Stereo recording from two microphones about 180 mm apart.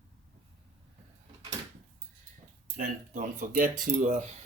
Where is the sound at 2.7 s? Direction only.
45° right (ahead or behind).